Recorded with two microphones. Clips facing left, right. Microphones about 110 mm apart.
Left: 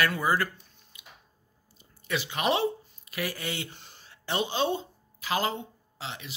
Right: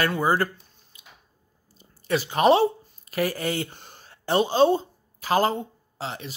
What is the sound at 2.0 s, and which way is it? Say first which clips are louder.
Speech: right 9 dB; 40° right (ahead or behind).